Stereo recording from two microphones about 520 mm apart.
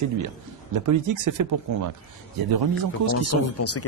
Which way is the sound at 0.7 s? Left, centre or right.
Right.